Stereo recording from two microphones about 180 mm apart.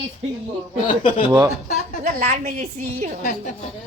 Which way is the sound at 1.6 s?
40° right (ahead or behind).